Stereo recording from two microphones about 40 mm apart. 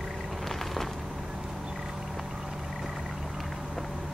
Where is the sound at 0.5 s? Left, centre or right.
Centre.